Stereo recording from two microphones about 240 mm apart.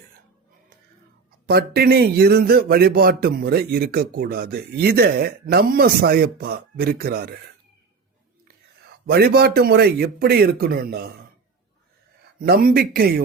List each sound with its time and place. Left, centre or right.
1.5 s a man's voice: right
8.9 s a man's voice: right
12.4 s a man's voice: right